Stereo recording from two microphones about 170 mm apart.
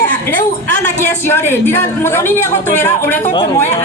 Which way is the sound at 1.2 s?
15° left (ahead or behind).